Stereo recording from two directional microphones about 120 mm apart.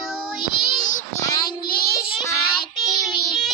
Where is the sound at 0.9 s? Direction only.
90° left.